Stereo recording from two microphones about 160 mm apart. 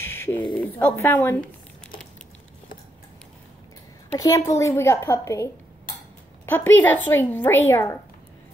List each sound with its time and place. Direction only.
0.0 s a sound: 15° left (ahead or behind)
0.6 s speech: 15° left (ahead or behind)
4.2 s a woman's voice: 20° left (ahead or behind)